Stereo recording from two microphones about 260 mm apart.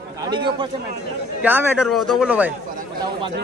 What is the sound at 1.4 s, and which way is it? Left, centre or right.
Speech, centre.